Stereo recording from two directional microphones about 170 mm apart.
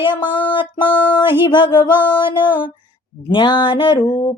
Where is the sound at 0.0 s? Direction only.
30° left (ahead or behind).